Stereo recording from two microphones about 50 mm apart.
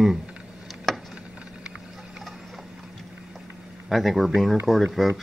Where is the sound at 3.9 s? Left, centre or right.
Centre.